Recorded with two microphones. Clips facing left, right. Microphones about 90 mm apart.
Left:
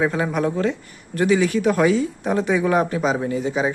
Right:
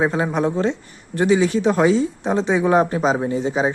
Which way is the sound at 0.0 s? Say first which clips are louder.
Right 1 dB; 25° right (ahead or behind).